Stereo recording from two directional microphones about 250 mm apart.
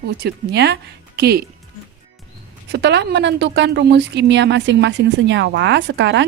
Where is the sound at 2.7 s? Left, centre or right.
Right.